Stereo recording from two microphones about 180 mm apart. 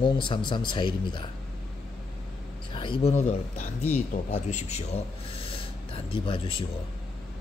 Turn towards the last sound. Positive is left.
turn(degrees=30)  # may be behind; listen again after turning